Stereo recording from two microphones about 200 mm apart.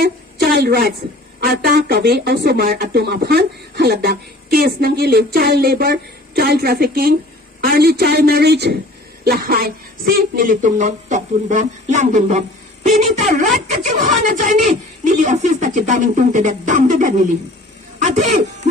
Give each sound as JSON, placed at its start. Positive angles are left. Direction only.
{"t": 0.6, "sound": "a woman's voice", "side_deg": -50}